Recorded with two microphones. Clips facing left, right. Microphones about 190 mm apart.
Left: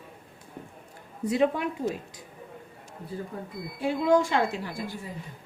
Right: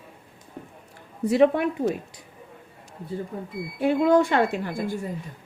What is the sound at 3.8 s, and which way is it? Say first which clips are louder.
Speech: right 4 dB; 60° right (ahead or behind).